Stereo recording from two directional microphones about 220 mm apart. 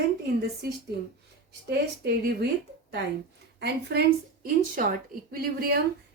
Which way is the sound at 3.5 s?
50° right (ahead or behind).